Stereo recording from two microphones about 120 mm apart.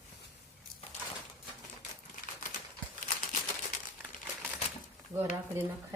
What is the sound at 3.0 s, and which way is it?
Crumpling, 90° left.